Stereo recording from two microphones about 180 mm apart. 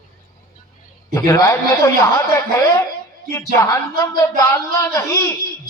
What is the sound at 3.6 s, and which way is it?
A man's voice, 15° left (ahead or behind).